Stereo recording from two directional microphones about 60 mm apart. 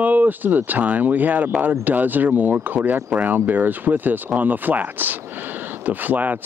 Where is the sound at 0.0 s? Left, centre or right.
Right.